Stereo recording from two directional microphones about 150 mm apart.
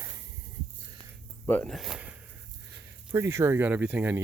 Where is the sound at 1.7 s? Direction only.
Centre (ahead or behind).